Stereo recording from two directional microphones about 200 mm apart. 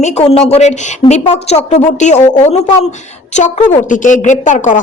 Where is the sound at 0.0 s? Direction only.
30° left (ahead or behind).